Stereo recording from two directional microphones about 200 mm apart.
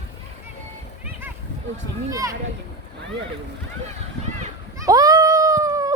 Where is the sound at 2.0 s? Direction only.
15° right (ahead or behind).